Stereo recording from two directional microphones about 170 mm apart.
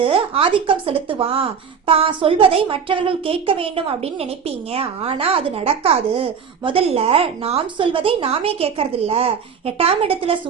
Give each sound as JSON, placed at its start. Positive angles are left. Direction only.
{"t": 0.0, "sound": "a woman's voice", "side_deg": -30}